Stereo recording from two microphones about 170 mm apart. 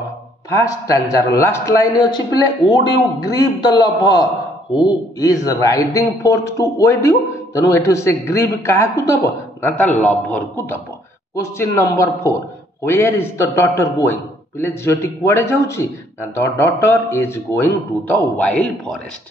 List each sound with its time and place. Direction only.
0.5 s a man's voice: 20° left (ahead or behind)